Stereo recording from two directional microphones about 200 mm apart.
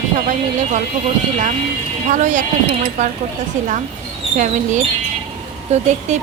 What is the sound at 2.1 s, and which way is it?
A woman's voice, 40° right (ahead or behind).